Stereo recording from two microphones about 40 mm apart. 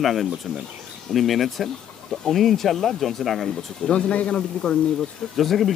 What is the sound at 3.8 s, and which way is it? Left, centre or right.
Speech, left.